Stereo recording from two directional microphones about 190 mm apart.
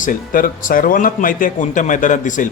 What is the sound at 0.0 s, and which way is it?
Speech, 45° left (ahead or behind).